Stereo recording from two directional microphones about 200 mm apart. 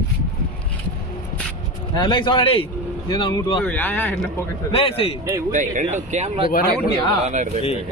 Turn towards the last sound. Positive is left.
turn(degrees=-35)  # may be behind; listen again after turning